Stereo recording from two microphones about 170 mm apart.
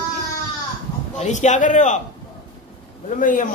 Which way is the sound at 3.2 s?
50° left (ahead or behind).